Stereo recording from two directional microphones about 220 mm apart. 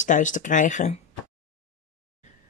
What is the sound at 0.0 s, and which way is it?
Speech, 35° left (ahead or behind).